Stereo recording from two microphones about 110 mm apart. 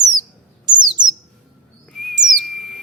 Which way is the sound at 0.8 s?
40° right (ahead or behind).